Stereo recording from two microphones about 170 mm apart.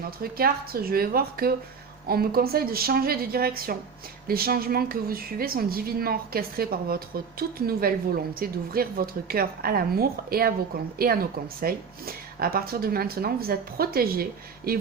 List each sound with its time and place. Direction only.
0.2 s a woman's voice: 60° right (ahead or behind)